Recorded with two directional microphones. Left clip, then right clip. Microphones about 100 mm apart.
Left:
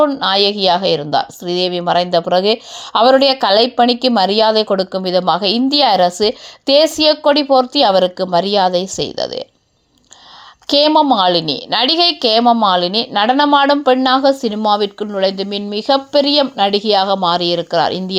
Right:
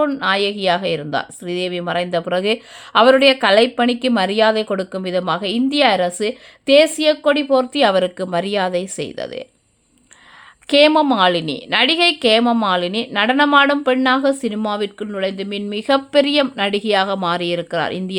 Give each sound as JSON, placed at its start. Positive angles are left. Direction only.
{"t": 0.2, "sound": "a woman's voice", "side_deg": -35}
{"t": 2.3, "sound": "a woman's voice", "side_deg": -50}
{"t": 10.7, "sound": "a woman's voice", "side_deg": -45}